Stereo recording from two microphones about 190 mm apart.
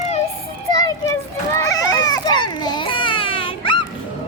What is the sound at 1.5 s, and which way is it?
Baby cry, 20° left (ahead or behind).